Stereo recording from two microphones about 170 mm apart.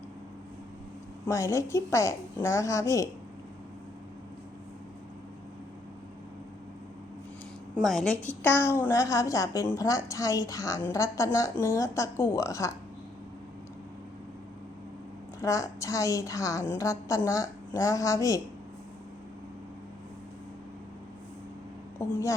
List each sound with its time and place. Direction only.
1.3 s a woman's voice: 20° left (ahead or behind)
7.8 s a woman's voice: centre (ahead or behind); by 12.7 s 20° left (ahead or behind)
15.4 s a woman's voice: 20° left (ahead or behind)
21.9 s speech: 20° left (ahead or behind)